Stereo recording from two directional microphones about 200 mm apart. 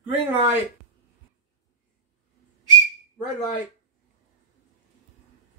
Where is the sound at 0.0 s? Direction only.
10° right (ahead or behind).